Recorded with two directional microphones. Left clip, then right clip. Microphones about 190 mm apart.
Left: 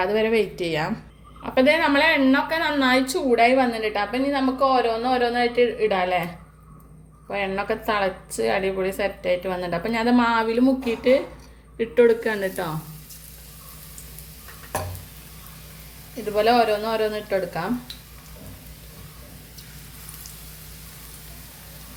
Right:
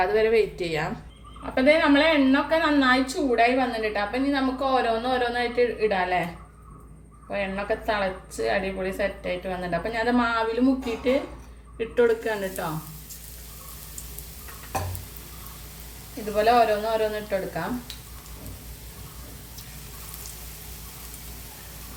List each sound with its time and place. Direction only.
0.0 s a woman's voice: 30° left (ahead or behind)
1.5 s a woman's voice: 50° left (ahead or behind)
7.3 s a woman's voice: 55° left (ahead or behind)
11.8 s a woman's voice: 40° left (ahead or behind)
16.3 s a woman's voice: 55° left (ahead or behind)